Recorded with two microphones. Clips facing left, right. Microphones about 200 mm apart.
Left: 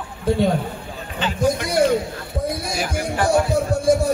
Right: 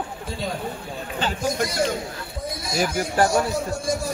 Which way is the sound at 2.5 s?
60° left (ahead or behind).